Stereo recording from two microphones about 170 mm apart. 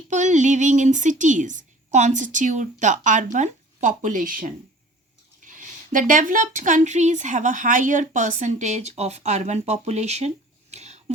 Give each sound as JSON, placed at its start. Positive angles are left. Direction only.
{"t": 0.1, "sound": "a woman's voice", "side_deg": -45}